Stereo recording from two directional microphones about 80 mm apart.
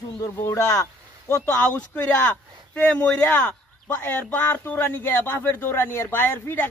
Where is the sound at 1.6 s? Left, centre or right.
Centre.